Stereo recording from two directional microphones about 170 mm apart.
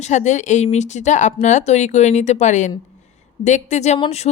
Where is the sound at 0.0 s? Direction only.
45° left (ahead or behind).